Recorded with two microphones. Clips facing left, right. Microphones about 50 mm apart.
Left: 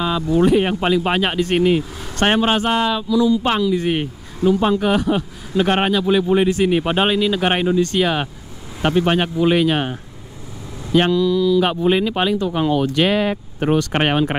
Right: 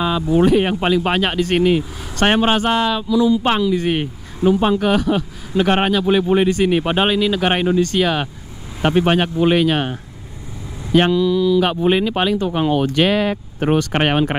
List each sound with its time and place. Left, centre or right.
0.0 s speech: centre
0.5 s speech: centre
2.5 s speech: centre
3.1 s speech: centre
3.7 s speech: centre
4.5 s speech: right
4.7 s speech: centre
6.0 s speech: centre
6.6 s speech: centre
8.9 s speech: centre
9.5 s speech: centre
10.9 s speech: centre
12.4 s speech: right
12.8 s speech: centre